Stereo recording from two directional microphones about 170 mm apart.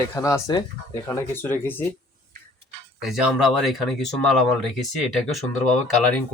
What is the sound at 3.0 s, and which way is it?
Speech, 5° right (ahead or behind).